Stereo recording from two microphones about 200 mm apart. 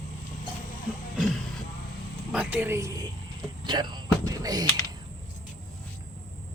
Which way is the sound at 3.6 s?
20° right (ahead or behind).